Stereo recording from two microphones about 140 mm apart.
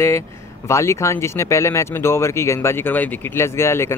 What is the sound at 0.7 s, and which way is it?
Speech, 20° left (ahead or behind).